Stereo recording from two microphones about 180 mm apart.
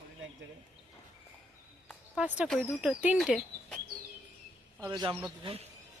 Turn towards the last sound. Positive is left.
turn(degrees=-35)  # may be behind; listen again after turning